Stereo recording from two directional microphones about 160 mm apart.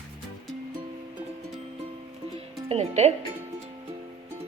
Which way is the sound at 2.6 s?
45° right (ahead or behind).